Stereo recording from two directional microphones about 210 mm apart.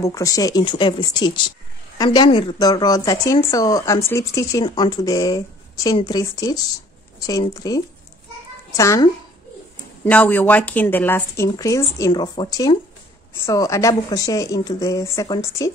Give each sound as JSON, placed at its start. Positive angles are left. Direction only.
{"t": 0.0, "sound": "speech", "side_deg": 15}